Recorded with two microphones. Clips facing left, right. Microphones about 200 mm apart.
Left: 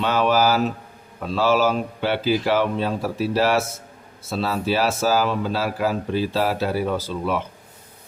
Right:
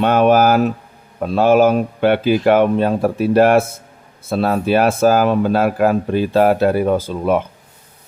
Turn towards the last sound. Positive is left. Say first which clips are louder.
# right 7 dB
turn(degrees=-50)  # may be behind; listen again after turning